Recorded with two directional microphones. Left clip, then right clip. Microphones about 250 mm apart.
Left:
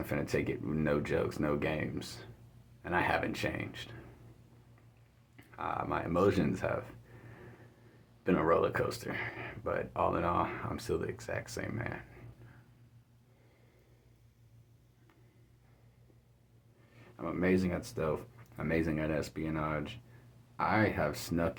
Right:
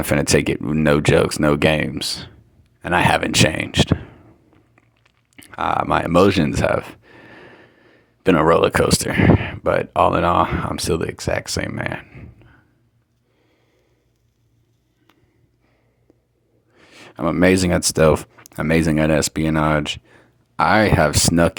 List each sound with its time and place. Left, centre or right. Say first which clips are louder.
0.0 s speech: right 17 dB; right
5.4 s speech: right 17 dB; right
16.9 s speech: right 17 dB; right